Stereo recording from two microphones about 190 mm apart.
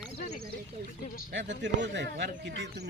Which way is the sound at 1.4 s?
70° right (ahead or behind).